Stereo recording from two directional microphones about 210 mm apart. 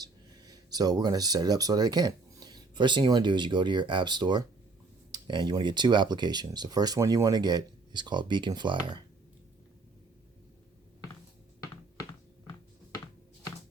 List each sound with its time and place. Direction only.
0.0 s speech: 20° right (ahead or behind)